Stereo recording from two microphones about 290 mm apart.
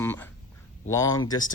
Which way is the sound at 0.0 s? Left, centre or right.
Centre.